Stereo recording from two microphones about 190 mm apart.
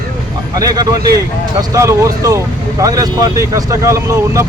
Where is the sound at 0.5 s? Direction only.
20° right (ahead or behind).